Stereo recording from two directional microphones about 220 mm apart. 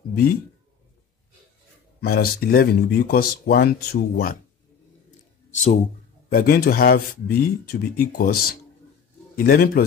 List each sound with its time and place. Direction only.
2.0 s speech: 45° left (ahead or behind)
5.5 s speech: 30° left (ahead or behind)
6.3 s speech: 45° left (ahead or behind)